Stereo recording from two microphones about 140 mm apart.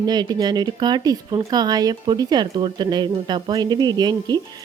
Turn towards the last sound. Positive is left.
turn(degrees=-30)  # may be behind; listen again after turning